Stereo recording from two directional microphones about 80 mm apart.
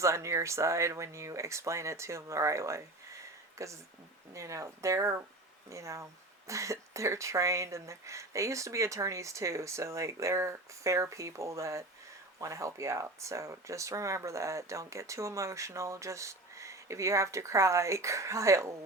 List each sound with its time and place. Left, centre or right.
0.0 s speech: right